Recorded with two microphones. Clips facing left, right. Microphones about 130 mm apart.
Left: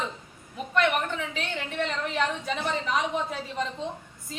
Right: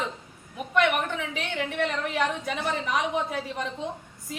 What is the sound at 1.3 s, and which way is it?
A woman's voice, 10° right (ahead or behind).